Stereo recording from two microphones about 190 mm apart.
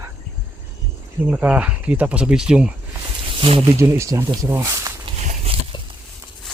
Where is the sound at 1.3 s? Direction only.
5° right (ahead or behind).